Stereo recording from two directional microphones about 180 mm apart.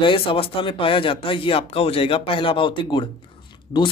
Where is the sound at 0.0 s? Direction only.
30° left (ahead or behind).